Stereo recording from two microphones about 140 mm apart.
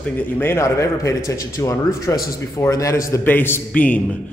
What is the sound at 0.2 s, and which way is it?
A man's voice, 15° left (ahead or behind).